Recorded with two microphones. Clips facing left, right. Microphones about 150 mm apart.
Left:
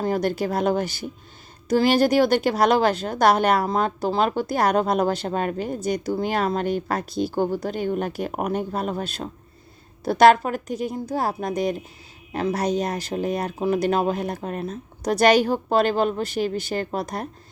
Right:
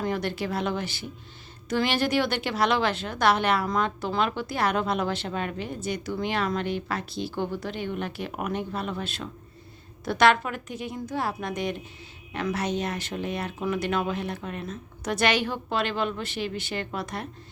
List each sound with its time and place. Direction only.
0.0 s a woman's voice: 40° left (ahead or behind)